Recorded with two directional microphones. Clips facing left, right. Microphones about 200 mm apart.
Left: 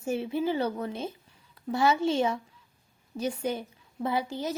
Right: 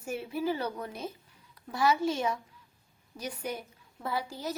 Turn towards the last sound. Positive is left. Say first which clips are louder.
# left 4 dB
turn(degrees=20)  # may be behind; listen again after turning